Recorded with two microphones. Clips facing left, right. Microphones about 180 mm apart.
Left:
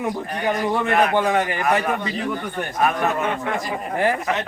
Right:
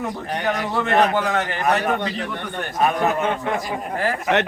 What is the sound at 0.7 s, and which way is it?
Speech, 15° left (ahead or behind).